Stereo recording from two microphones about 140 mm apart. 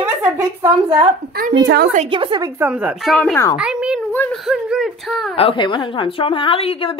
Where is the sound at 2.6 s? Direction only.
10° right (ahead or behind).